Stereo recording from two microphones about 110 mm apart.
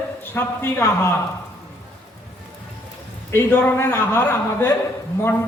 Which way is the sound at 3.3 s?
20° left (ahead or behind).